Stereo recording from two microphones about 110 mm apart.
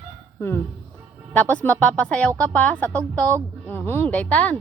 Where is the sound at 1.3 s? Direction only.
15° left (ahead or behind).